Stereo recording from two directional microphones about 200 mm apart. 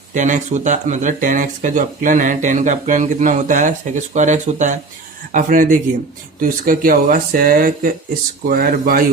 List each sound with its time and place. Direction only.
0.1 s speech: 40° right (ahead or behind)